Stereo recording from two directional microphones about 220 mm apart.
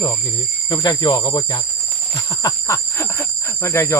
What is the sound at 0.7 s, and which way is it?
Speech, 20° left (ahead or behind).